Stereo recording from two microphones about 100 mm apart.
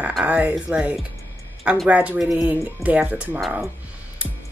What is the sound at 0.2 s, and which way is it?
Speech, 15° right (ahead or behind).